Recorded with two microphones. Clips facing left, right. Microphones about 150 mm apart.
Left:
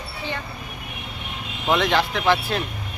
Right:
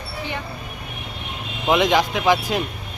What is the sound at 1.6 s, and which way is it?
Speech, 15° right (ahead or behind).